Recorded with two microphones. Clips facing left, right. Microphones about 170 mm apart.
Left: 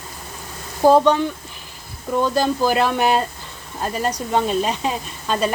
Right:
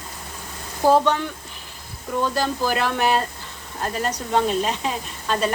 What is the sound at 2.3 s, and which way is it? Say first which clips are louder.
Speech: left 5 dB; 15° left (ahead or behind).